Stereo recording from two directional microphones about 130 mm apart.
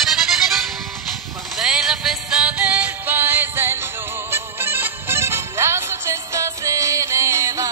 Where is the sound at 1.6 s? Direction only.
5° right (ahead or behind).